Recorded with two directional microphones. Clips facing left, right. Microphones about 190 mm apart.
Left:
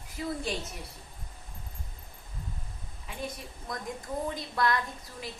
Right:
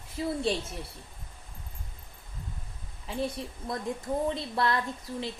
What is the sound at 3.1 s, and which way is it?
A woman's voice, 30° right (ahead or behind).